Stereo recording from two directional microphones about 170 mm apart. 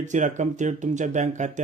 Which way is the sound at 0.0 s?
45° right (ahead or behind).